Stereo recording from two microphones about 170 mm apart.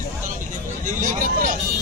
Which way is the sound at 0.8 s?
50° right (ahead or behind).